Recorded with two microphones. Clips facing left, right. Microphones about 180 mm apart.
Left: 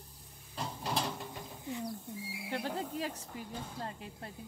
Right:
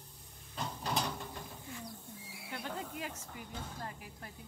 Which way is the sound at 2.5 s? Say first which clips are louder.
Left 5 dB; 35° left (ahead or behind).